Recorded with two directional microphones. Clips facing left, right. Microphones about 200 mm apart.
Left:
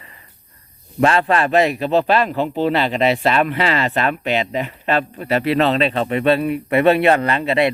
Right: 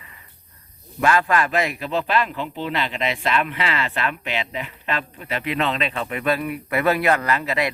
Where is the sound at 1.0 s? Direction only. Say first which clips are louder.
Left 3 dB; 30° left (ahead or behind).